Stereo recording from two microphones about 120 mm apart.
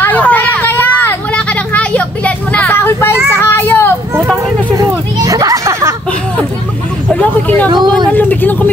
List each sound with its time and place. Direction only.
0.0 s vehicle: 15° left (ahead or behind)
4.5 s a sound: 25° right (ahead or behind)
7.2 s vehicle: 15° left (ahead or behind)
7.6 s speech: 35° right (ahead or behind)
8.1 s vehicle: 15° left (ahead or behind)